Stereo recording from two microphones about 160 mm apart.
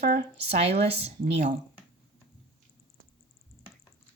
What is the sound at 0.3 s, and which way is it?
Speech, 40° right (ahead or behind).